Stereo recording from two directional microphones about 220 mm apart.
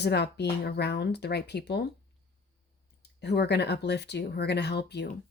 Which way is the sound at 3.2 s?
50° left (ahead or behind).